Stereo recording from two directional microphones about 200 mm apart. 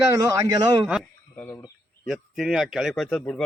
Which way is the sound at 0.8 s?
Centre (ahead or behind).